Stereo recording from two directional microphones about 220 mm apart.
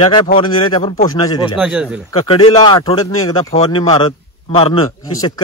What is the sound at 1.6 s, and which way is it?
Speech, 5° right (ahead or behind).